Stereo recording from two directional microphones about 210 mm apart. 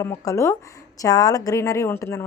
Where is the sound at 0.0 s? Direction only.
15° left (ahead or behind).